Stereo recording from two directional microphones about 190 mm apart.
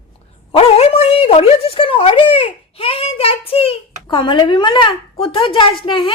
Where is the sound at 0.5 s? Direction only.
30° left (ahead or behind).